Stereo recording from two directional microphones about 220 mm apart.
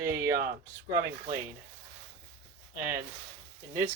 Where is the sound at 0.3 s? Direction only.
45° right (ahead or behind).